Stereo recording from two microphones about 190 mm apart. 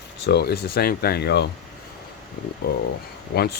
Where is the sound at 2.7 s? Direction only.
60° left (ahead or behind).